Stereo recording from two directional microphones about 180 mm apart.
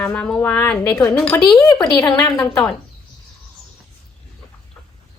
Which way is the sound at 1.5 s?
20° left (ahead or behind).